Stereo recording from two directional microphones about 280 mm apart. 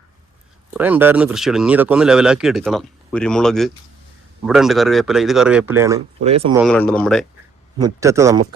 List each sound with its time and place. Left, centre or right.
0.7 s speech: centre
6.2 s speech: right
6.6 s speech: centre
7.8 s speech: centre